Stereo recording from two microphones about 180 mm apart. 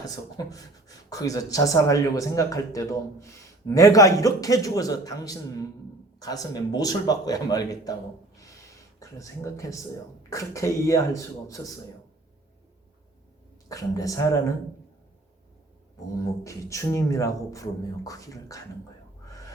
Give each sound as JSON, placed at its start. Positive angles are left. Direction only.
{"t": 0.0, "sound": "speech", "side_deg": 20}
{"t": 9.0, "sound": "speech", "side_deg": 15}
{"t": 13.7, "sound": "speech", "side_deg": 20}
{"t": 16.1, "sound": "speech", "side_deg": 15}